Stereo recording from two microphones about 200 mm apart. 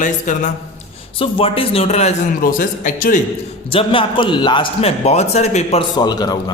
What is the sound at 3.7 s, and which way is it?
A man's voice, 25° left (ahead or behind).